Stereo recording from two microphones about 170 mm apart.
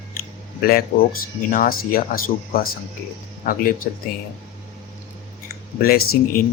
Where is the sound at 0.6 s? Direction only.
60° left (ahead or behind).